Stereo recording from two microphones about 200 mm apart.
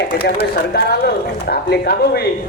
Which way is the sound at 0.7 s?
50° left (ahead or behind).